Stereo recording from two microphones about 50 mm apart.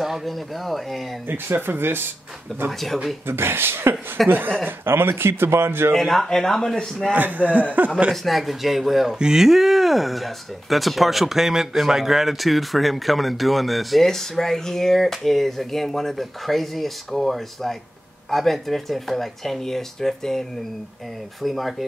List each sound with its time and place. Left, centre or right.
0.0 s speech: centre
1.2 s speech: right
2.8 s speech: centre
3.3 s speech: right
4.2 s speech: centre
4.6 s speech: right
5.9 s speech: centre
7.1 s a man's voice: right
8.1 s speech: centre